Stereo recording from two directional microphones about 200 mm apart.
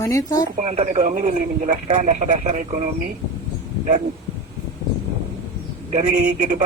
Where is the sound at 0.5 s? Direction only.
35° right (ahead or behind).